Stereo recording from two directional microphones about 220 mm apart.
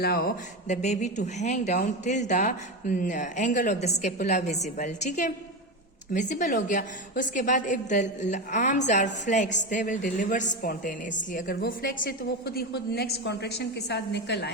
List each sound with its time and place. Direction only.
0.0 s a woman's voice: 45° left (ahead or behind)